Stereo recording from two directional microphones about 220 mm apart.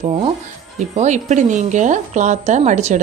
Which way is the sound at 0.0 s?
25° right (ahead or behind).